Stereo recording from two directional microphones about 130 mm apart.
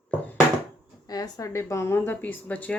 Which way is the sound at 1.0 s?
30° left (ahead or behind).